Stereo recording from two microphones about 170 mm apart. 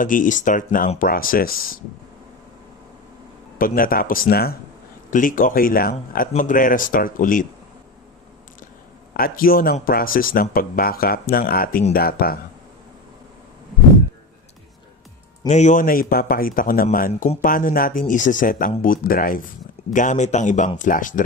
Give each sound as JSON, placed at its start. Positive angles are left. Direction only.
{"t": 0.0, "sound": "a man's voice", "side_deg": 50}
{"t": 3.5, "sound": "speech", "side_deg": 55}
{"t": 5.1, "sound": "a man's voice", "side_deg": 50}
{"t": 9.1, "sound": "speech", "side_deg": 60}
{"t": 15.4, "sound": "speech", "side_deg": 45}
{"t": 19.9, "sound": "a man's voice", "side_deg": 45}